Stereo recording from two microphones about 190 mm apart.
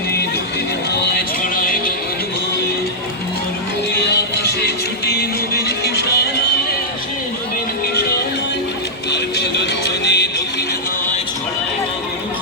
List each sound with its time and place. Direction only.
1.1 s music: 45° left (ahead or behind)
4.4 s music: 55° left (ahead or behind)
9.0 s music: 60° left (ahead or behind)